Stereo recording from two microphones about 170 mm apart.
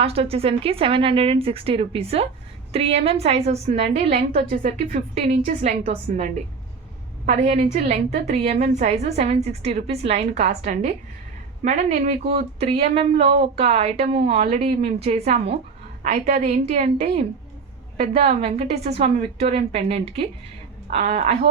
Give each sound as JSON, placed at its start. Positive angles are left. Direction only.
{"t": 0.0, "sound": "a woman's voice", "side_deg": -35}